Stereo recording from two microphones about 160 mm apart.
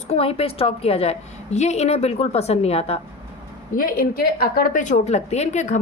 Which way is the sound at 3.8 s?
65° left (ahead or behind).